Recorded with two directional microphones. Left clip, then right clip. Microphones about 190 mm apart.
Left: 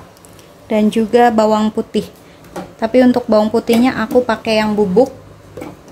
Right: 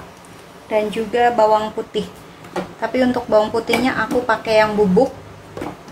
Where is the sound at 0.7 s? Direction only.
60° left (ahead or behind).